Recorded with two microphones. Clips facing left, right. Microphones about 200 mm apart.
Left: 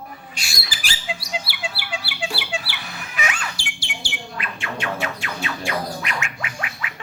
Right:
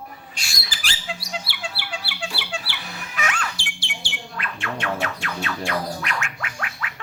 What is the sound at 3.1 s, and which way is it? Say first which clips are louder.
Bird: even; 5° left (ahead or behind).